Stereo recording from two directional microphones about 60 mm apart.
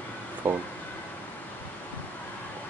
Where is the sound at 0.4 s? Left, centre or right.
Right.